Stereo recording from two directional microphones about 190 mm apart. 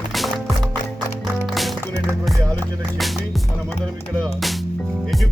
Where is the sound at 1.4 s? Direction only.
Centre (ahead or behind).